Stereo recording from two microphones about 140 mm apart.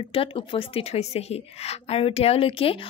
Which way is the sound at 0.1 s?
40° left (ahead or behind).